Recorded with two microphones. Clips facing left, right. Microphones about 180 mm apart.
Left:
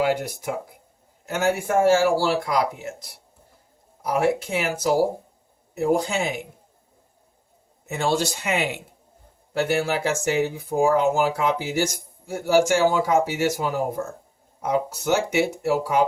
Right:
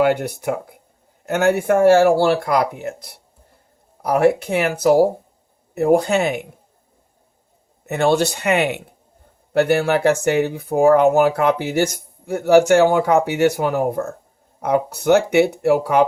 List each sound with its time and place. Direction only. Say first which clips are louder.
0.0 s speech: right 5 dB; 60° right (ahead or behind)
7.9 s speech: right 6 dB; 60° right (ahead or behind)